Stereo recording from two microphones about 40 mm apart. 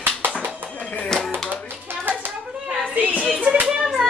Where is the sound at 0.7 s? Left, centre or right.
Left.